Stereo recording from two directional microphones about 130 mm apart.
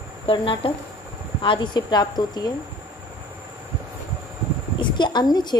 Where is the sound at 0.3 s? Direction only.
45° left (ahead or behind).